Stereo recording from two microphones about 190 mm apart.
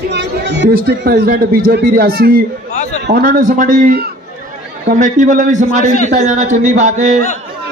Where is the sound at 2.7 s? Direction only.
40° left (ahead or behind).